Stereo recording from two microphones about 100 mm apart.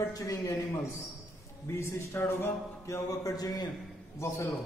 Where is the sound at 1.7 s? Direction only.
25° left (ahead or behind); by 3.6 s 40° left (ahead or behind).